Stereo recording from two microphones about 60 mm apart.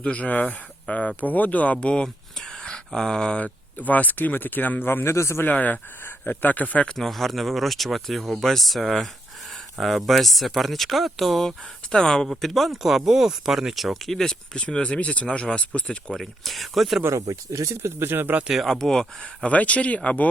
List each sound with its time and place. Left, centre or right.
0.0 s speech: left
5.5 s speech: left
6.8 s speech: centre
16.1 s speech: centre
17.2 s speech: right
18.0 s speech: right
18.4 s speech: centre
18.7 s speech: centre